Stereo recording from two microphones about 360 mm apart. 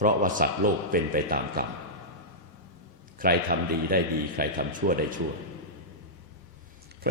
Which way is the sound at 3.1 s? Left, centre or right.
Right.